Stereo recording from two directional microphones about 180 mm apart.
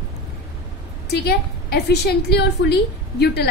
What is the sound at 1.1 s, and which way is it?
A woman's voice, 65° left (ahead or behind).